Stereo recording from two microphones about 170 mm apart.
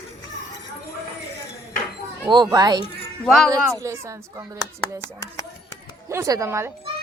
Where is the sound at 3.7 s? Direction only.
15° right (ahead or behind).